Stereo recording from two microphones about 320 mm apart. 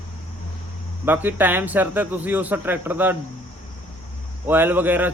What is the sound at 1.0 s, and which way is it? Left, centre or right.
Speech, centre.